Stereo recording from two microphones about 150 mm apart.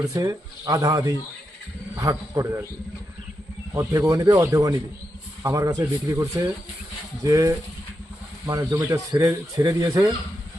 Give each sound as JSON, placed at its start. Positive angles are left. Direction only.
{"t": 0.0, "sound": "speech", "side_deg": -25}
{"t": 3.8, "sound": "speech", "side_deg": -20}